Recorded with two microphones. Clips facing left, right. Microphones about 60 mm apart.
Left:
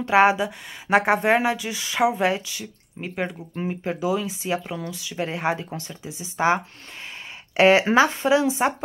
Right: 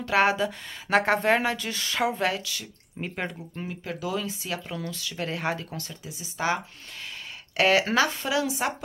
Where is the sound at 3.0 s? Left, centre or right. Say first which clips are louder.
Left 4 dB; centre.